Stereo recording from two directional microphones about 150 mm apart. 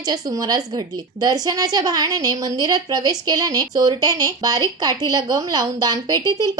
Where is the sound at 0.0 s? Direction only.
25° right (ahead or behind).